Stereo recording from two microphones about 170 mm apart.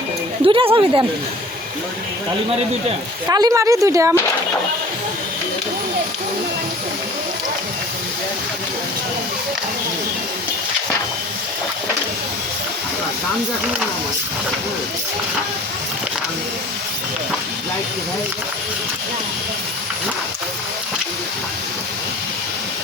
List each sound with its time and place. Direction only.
0.4 s speech: 30° right (ahead or behind)
3.2 s a woman's voice: 20° right (ahead or behind)